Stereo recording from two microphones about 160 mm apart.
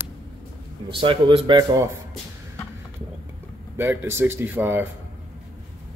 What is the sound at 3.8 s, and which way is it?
Speech, 15° right (ahead or behind).